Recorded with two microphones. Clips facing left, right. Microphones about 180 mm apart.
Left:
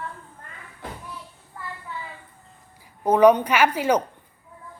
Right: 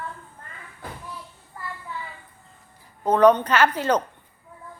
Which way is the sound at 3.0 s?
10° left (ahead or behind).